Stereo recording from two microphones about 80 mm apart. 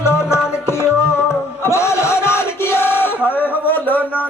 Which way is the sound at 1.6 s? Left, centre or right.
Left.